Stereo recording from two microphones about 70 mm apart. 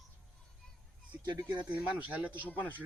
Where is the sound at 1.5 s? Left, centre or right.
Right.